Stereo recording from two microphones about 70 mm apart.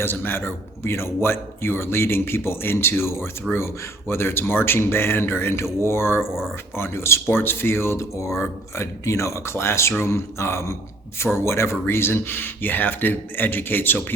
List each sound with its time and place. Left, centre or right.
0.0 s speech: left
3.5 s speech: centre
4.1 s speech: left